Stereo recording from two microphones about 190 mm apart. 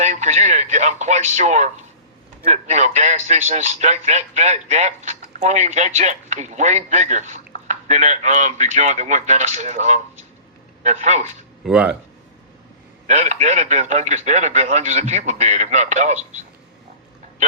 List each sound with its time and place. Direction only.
0.0 s a man's voice: 35° right (ahead or behind)
11.6 s speech: 5° right (ahead or behind)
13.1 s a man's voice: 35° right (ahead or behind)